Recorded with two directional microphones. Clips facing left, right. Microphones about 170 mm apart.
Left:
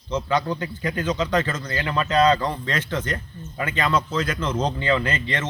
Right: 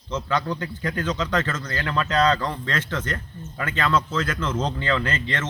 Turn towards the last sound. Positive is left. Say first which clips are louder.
# left 1 dB
turn(degrees=15)  # may be behind; listen again after turning